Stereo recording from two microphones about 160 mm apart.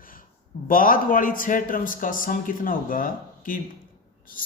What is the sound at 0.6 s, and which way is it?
A man's voice, 60° left (ahead or behind).